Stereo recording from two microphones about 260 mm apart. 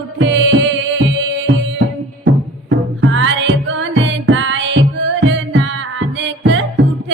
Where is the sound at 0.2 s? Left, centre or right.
Right.